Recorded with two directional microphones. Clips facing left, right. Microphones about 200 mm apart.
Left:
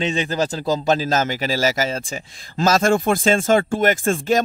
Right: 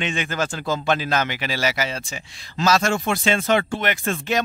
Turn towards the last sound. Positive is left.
turn(degrees=45)  # may be behind; listen again after turning